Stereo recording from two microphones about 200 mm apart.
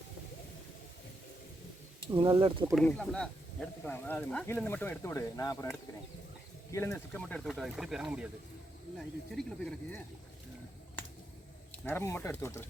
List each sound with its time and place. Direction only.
2.1 s speech: 25° right (ahead or behind)
2.7 s speech: 5° left (ahead or behind)
11.9 s speech: 10° left (ahead or behind)